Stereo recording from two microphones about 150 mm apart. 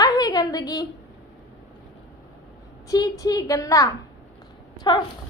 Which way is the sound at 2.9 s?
25° left (ahead or behind).